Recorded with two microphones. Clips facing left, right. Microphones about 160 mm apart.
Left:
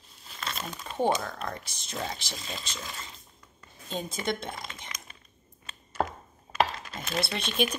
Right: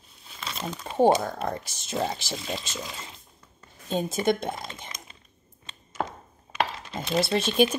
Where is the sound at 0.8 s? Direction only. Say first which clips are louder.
Right 7 dB; 45° right (ahead or behind).